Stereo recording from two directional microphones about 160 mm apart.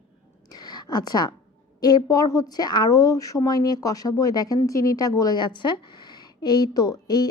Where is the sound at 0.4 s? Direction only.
25° left (ahead or behind).